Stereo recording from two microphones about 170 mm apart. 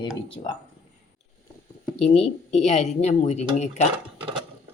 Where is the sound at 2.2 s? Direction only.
40° left (ahead or behind).